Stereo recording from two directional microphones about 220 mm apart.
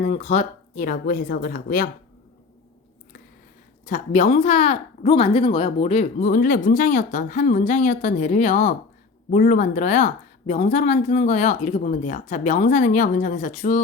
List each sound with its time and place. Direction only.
0.0 s speech: 30° left (ahead or behind)
3.8 s speech: 30° left (ahead or behind)